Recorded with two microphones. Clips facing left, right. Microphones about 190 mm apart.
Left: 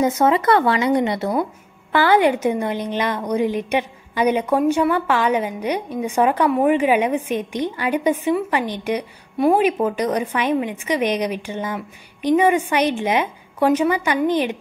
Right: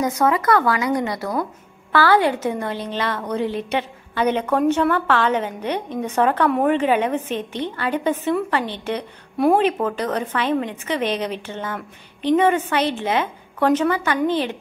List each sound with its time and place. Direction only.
0.0 s speech: 25° left (ahead or behind)